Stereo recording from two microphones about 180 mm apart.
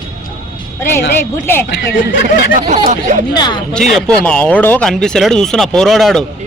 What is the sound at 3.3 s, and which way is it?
Speech, 25° left (ahead or behind).